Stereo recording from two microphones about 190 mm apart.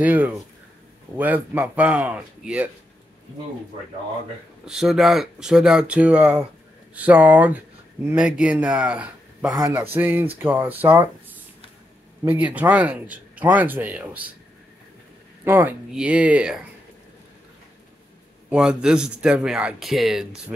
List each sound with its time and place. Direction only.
0.0 s speech: 10° right (ahead or behind)
4.6 s speech: centre (ahead or behind)
9.5 s speech: 20° right (ahead or behind)
9.9 s speech: 10° right (ahead or behind)
15.4 s speech: 10° right (ahead or behind)
18.5 s speech: 5° right (ahead or behind)